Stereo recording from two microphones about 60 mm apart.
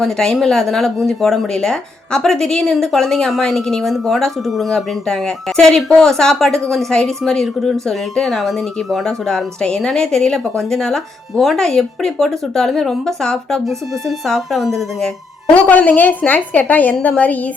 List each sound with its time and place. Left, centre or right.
0.2 s speech: centre
9.2 s speech: centre
15.5 s a woman's voice: left